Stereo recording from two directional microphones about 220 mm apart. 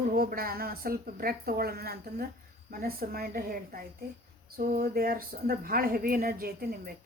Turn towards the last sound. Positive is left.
turn(degrees=-45)  # may be behind; listen again after turning